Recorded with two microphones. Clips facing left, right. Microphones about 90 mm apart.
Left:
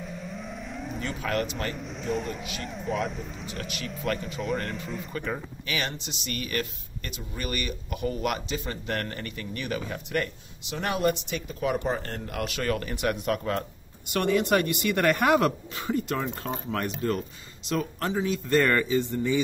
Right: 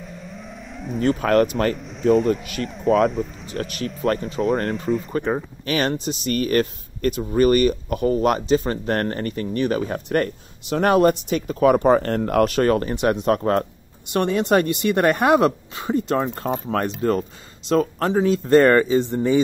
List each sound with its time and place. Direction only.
0.0 s vehicle: centre (ahead or behind)
1.0 s speech: 45° right (ahead or behind)
1.8 s speech: centre (ahead or behind)
3.5 s speech: 40° right (ahead or behind); by 12.4 s 55° right (ahead or behind)
12.4 s speech: 40° right (ahead or behind)
14.1 s a woman's voice: 30° right (ahead or behind)